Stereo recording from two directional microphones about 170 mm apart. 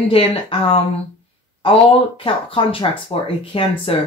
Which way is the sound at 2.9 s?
30° left (ahead or behind).